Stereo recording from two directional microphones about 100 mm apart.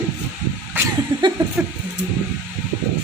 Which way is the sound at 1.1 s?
50° right (ahead or behind).